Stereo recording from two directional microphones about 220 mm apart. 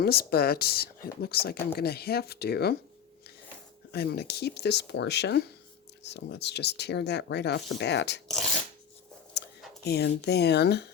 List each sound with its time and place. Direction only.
0.0 s speech: 45° left (ahead or behind)
3.9 s speech: 45° left (ahead or behind)
9.4 s a sound: 50° left (ahead or behind)
9.8 s speech: 50° left (ahead or behind)